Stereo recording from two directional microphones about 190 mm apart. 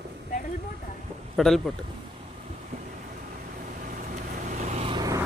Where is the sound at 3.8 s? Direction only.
45° right (ahead or behind); by 5.2 s 20° right (ahead or behind).